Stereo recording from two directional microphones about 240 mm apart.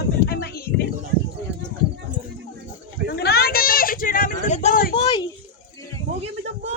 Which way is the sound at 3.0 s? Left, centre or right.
Left.